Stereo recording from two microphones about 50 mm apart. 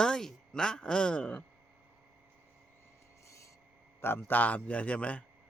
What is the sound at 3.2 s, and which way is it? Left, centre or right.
Rub, left.